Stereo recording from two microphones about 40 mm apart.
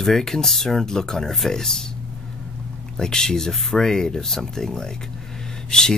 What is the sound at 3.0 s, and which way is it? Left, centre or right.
Speech, centre.